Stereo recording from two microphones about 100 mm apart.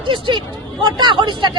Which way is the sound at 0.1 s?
55° right (ahead or behind).